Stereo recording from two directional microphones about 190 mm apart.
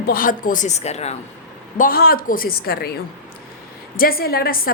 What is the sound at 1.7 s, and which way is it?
A woman's voice, 50° left (ahead or behind).